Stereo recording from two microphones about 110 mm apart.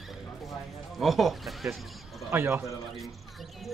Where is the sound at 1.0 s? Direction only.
Centre (ahead or behind).